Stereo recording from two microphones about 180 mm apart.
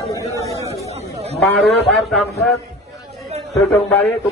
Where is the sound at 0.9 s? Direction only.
35° right (ahead or behind).